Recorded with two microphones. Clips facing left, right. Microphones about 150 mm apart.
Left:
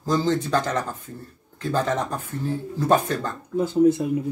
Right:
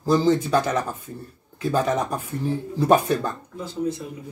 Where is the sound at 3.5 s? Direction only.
50° left (ahead or behind).